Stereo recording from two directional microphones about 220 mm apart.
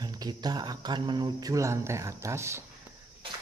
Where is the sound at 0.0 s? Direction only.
20° right (ahead or behind).